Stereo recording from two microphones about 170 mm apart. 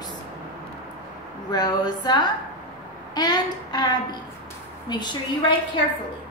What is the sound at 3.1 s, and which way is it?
Speech, 25° left (ahead or behind).